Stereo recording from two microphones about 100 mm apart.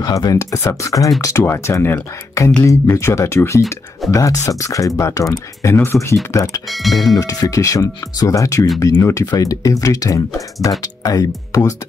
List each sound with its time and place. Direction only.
0.0 s speech: 40° left (ahead or behind)
6.7 s speech: centre (ahead or behind)
7.2 s speech: 35° left (ahead or behind)